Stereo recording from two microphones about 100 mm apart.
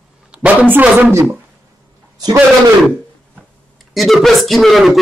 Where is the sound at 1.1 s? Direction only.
30° right (ahead or behind).